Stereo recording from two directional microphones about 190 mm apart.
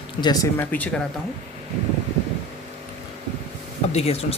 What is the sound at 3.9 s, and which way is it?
Speech, 35° left (ahead or behind).